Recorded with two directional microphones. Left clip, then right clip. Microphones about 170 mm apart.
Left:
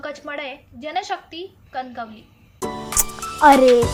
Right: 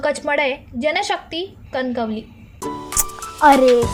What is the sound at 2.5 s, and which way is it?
Music, centre (ahead or behind).